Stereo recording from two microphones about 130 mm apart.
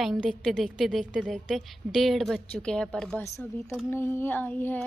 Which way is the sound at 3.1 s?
20° left (ahead or behind).